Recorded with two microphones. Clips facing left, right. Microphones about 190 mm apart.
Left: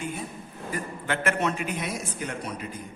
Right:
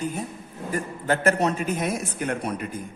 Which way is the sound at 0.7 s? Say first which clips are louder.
Right 5 dB; 40° right (ahead or behind).